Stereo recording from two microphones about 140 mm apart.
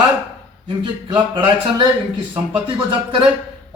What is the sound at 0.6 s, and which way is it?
Speech, 35° right (ahead or behind).